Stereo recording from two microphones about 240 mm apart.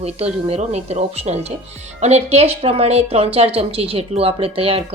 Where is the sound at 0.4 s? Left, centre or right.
Right.